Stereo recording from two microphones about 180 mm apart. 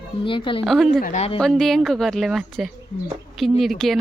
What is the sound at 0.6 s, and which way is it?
Speech, centre (ahead or behind).